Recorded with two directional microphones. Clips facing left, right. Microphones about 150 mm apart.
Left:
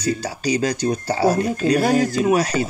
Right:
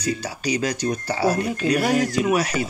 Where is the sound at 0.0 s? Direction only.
30° left (ahead or behind).